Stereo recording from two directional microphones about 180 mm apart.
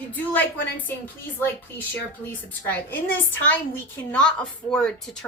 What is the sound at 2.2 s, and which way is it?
A woman's voice, 10° left (ahead or behind).